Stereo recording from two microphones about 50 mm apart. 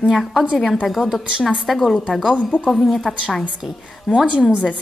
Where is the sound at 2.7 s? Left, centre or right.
Centre.